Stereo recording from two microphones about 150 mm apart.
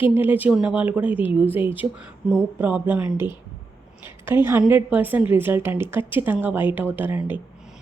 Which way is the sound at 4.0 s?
15° right (ahead or behind).